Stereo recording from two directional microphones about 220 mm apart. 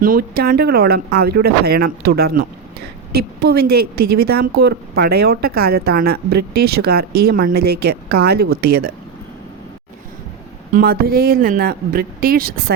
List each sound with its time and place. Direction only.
0.0 s a woman's voice: 40° right (ahead or behind)
10.7 s a woman's voice: 40° right (ahead or behind)